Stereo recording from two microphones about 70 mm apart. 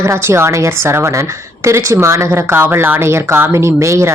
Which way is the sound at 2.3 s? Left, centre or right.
Right.